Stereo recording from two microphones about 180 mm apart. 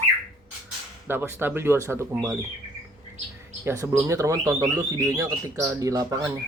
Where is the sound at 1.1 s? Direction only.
10° right (ahead or behind).